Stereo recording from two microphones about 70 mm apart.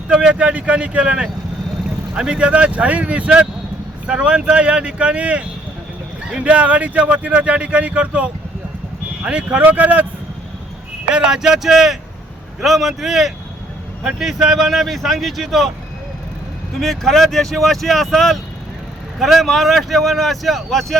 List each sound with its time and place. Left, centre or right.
0.1 s speech: centre
11.1 s speech: centre
16.8 s speech: centre